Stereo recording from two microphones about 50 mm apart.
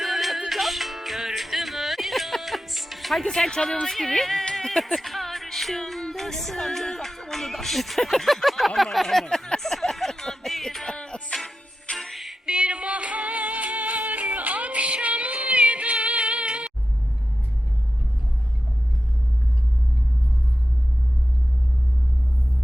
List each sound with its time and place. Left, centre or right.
0.0 s music: centre
3.8 s speech: centre
4.5 s music: centre
9.2 s speech: centre
9.6 s a sound: centre
10.9 s music: centre
11.9 s music: centre
12.5 s music: centre
14.3 s female singing: right